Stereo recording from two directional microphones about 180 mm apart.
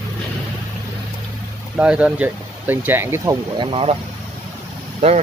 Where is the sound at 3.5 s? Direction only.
30° right (ahead or behind).